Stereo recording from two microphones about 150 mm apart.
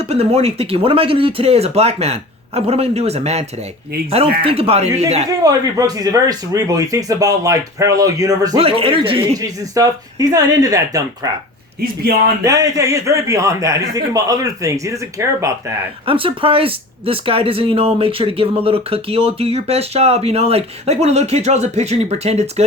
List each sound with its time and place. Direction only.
0.0 s speech: 40° right (ahead or behind)
4.4 s speech: 40° right (ahead or behind)
5.4 s speech: 25° right (ahead or behind)
8.5 s speech: 40° right (ahead or behind)
9.4 s speech: 25° right (ahead or behind)
12.4 s speech: 20° right (ahead or behind)
16.0 s speech: 35° right (ahead or behind)